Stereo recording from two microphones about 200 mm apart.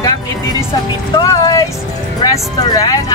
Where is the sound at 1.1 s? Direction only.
20° left (ahead or behind).